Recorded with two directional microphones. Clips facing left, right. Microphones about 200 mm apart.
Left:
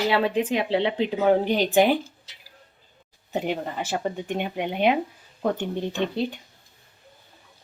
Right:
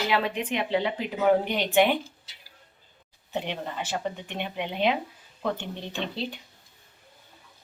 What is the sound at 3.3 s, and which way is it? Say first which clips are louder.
Speech: left 4 dB; 45° left (ahead or behind).